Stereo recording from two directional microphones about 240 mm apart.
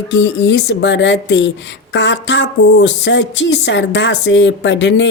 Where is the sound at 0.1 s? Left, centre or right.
Left.